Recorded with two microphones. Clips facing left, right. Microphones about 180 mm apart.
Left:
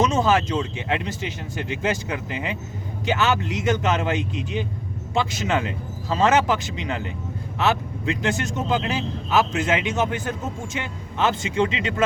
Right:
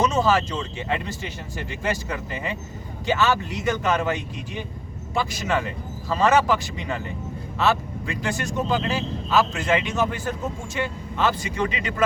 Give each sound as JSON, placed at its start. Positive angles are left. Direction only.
{"t": 0.0, "sound": "speech", "side_deg": 20}